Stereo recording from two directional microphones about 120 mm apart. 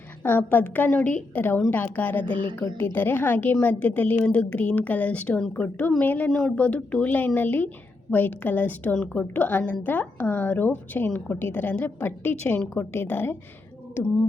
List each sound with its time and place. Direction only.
0.2 s a woman's voice: 15° left (ahead or behind)
2.2 s a woman's voice: 45° right (ahead or behind)
2.7 s a woman's voice: 15° left (ahead or behind)